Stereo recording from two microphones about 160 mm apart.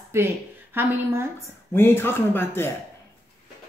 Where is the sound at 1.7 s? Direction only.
15° left (ahead or behind).